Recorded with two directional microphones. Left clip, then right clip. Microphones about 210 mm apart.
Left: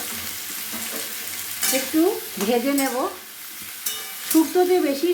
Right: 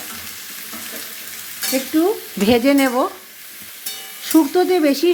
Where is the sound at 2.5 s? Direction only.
50° right (ahead or behind).